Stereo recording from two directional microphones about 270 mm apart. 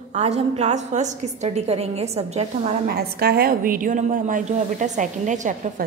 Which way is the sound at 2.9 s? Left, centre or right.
Right.